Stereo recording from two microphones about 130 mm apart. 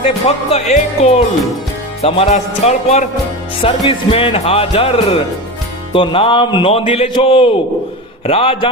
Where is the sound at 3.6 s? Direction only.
45° left (ahead or behind).